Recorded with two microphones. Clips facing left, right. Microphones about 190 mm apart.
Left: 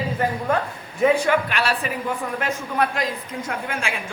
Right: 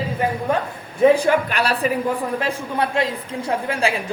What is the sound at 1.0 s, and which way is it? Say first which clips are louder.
A woman's voice: right 4 dB; 35° right (ahead or behind).